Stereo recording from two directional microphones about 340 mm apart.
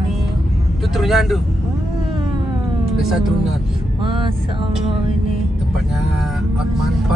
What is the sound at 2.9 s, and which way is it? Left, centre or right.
Speech, centre.